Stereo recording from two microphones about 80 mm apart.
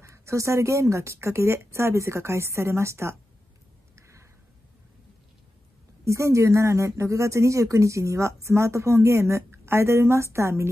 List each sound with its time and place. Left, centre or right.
0.0 s speech: right
3.9 s a sound: right
6.0 s speech: right